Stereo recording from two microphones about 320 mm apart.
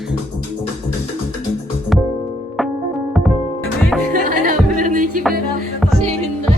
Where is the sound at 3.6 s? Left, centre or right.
Centre.